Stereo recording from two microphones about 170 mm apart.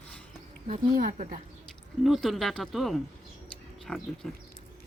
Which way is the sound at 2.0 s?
Centre (ahead or behind).